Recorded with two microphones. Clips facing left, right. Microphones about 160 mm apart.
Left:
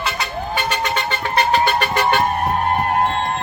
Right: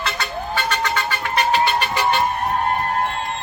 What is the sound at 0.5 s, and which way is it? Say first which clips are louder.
Emergency vehicle: left 1 dB; 20° left (ahead or behind).